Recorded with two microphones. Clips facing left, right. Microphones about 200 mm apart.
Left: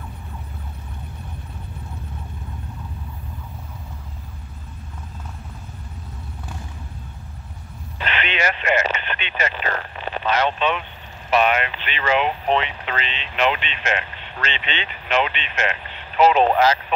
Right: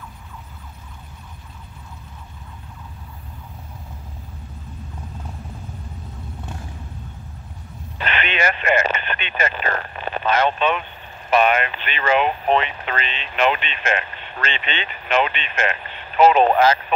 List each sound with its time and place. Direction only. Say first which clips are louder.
8.0 s speech: right 1 dB; 50° right (ahead or behind)